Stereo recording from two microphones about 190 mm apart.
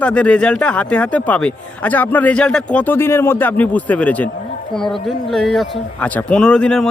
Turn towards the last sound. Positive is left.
turn(degrees=5)  # may be behind; listen again after turning